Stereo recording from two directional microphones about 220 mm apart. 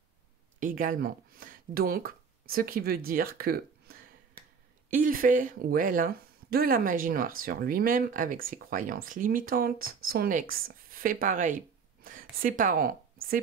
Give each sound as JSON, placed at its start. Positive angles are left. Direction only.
{"t": 0.6, "sound": "speech", "side_deg": -35}